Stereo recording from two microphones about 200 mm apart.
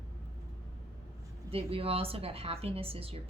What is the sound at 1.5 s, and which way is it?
A woman's voice, 30° right (ahead or behind).